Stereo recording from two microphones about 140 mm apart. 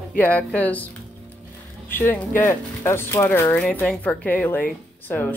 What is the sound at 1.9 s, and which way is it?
Speech, 15° left (ahead or behind).